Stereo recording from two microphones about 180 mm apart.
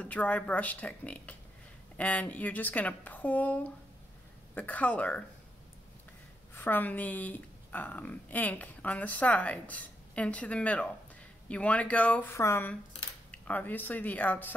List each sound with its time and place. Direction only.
0.0 s a woman's voice: 10° left (ahead or behind)
6.5 s a woman's voice: 10° left (ahead or behind)